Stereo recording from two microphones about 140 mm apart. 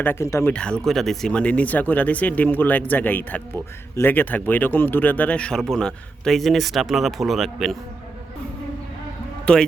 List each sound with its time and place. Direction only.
0.0 s speech: 15° left (ahead or behind)
0.5 s speech: 5° left (ahead or behind)
9.5 s speech: 5° left (ahead or behind)